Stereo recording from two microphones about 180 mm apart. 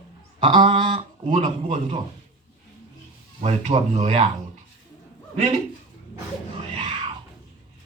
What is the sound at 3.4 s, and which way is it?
Speech, 35° right (ahead or behind).